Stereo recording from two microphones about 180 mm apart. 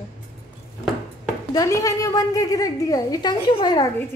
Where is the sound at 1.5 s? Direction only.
20° left (ahead or behind).